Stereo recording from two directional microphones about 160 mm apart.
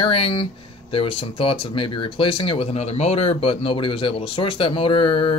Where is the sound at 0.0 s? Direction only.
35° left (ahead or behind).